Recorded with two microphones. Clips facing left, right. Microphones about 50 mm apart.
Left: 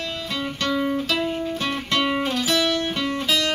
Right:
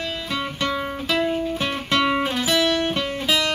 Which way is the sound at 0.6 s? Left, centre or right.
Centre.